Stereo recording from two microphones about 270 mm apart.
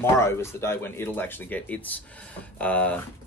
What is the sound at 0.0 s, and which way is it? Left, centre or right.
Speech, centre.